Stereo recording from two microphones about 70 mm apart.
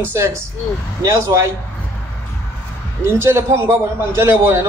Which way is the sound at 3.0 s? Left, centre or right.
Right.